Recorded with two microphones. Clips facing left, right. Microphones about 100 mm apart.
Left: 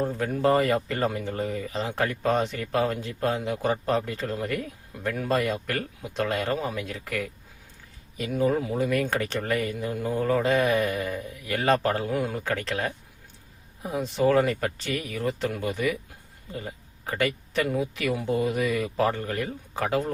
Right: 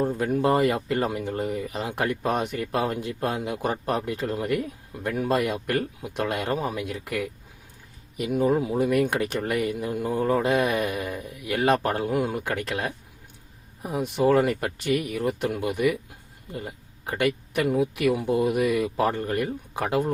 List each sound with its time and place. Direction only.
0.0 s speech: 15° right (ahead or behind)